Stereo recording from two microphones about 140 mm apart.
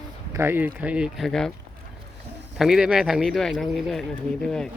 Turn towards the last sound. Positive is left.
turn(degrees=5)  # may be behind; listen again after turning